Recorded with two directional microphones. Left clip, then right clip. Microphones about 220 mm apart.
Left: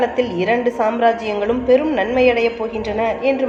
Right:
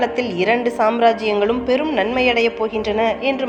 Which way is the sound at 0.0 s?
30° right (ahead or behind).